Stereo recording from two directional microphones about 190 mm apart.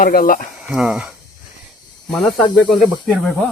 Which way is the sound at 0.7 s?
5° right (ahead or behind).